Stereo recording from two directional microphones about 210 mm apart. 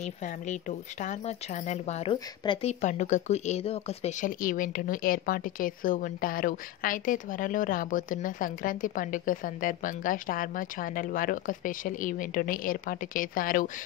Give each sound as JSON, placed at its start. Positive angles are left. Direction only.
{"t": 0.0, "sound": "speech", "side_deg": 35}
{"t": 2.8, "sound": "speech", "side_deg": 35}